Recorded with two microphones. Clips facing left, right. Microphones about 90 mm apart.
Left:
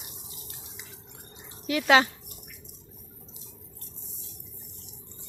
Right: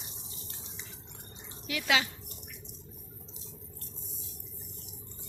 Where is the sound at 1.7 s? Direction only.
40° left (ahead or behind).